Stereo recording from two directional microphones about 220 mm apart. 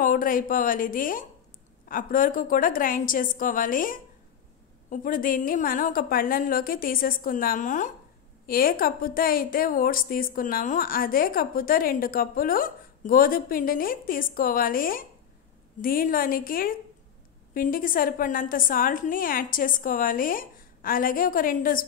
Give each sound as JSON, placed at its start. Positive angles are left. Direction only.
{"t": 0.0, "sound": "a woman's voice", "side_deg": 40}